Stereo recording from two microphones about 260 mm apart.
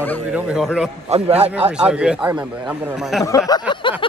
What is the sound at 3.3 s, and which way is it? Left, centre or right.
Speech, centre.